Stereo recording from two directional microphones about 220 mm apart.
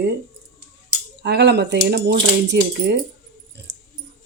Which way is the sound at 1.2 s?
50° right (ahead or behind).